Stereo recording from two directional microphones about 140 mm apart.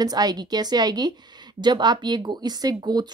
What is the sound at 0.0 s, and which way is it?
A woman's voice, 30° right (ahead or behind).